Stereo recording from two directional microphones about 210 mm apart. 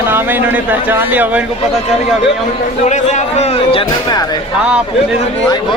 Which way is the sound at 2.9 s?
35° left (ahead or behind).